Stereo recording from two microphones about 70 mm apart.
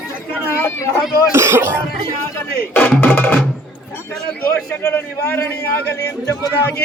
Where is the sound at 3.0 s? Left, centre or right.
Left.